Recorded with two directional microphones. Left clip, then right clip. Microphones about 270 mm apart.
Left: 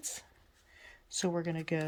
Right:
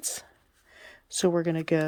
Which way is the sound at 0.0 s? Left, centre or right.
Centre.